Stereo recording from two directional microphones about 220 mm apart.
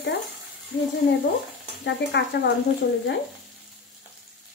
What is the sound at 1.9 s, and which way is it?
Speech, 55° left (ahead or behind).